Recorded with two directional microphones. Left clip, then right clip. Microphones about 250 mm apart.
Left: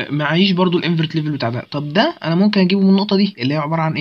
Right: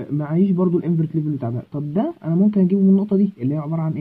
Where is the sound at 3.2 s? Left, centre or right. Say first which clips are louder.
Left 5 dB; centre.